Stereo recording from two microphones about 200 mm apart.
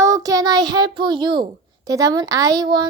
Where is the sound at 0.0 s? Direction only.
15° right (ahead or behind).